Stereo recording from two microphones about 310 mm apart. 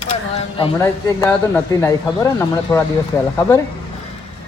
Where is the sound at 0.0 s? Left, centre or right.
Left.